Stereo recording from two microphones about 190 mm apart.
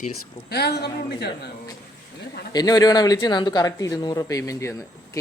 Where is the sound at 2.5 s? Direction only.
20° left (ahead or behind).